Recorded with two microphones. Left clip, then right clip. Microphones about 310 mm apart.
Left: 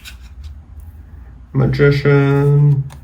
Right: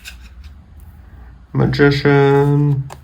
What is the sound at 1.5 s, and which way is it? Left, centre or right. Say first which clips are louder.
Speech: even; centre.